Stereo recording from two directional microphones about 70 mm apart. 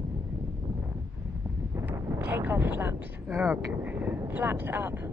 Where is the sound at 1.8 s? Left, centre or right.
Right.